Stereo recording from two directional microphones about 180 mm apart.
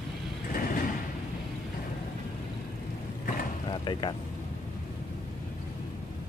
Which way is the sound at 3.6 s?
25° left (ahead or behind).